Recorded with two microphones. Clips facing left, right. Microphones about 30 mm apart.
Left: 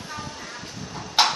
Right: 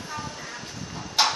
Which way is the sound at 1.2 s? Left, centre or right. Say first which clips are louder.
Left 2 dB; centre.